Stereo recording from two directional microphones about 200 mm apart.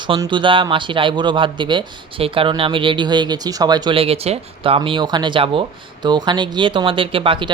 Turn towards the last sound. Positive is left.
turn(degrees=-25)  # may be behind; listen again after turning